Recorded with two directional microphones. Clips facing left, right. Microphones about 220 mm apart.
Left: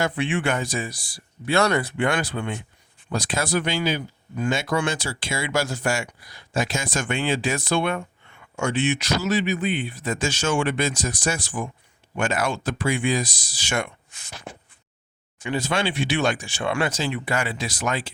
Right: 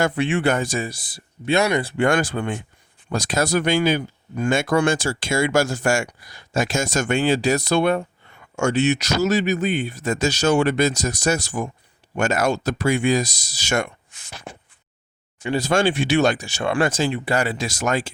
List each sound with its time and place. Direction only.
0.0 s speech: 40° right (ahead or behind)
0.9 s speech: 25° right (ahead or behind)
2.0 s speech: 45° right (ahead or behind)
15.4 s speech: 35° right (ahead or behind)
17.1 s speech: 30° right (ahead or behind)